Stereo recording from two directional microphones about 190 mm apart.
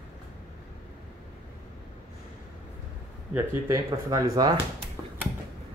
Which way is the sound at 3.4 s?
15° right (ahead or behind).